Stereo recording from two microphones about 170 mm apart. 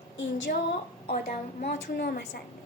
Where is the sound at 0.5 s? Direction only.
60° left (ahead or behind).